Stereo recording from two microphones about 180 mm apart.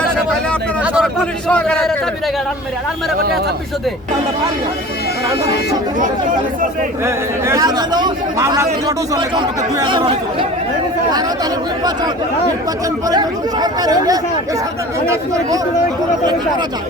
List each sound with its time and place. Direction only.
0.9 s a man's voice: 5° left (ahead or behind)
7.0 s speech: 15° right (ahead or behind)
13.1 s speech: 20° right (ahead or behind)